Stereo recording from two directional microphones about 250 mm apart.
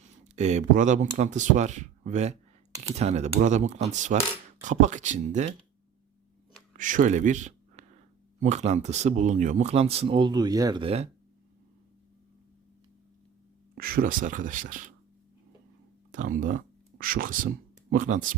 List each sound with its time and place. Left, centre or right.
0.3 s speech: right
6.7 s speech: right
13.7 s speech: right
16.1 s speech: right